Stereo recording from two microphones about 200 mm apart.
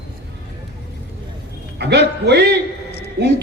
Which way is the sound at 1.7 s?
55° right (ahead or behind).